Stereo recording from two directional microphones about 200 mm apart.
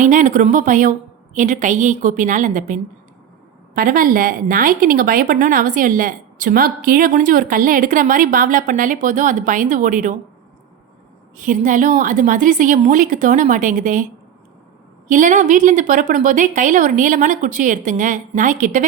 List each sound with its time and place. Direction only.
0.0 s a woman's voice: 40° right (ahead or behind)
11.3 s a woman's voice: 40° right (ahead or behind)